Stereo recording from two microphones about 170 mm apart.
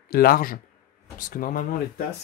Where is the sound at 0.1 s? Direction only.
60° left (ahead or behind).